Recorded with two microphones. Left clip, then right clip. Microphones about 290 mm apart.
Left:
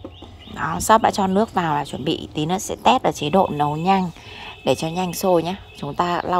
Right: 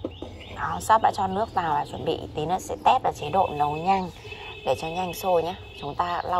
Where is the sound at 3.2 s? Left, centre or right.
Left.